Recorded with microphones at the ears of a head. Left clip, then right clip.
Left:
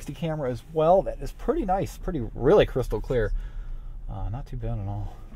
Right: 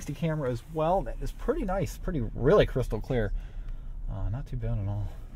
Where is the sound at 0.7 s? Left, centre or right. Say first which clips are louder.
Left 8 dB; left.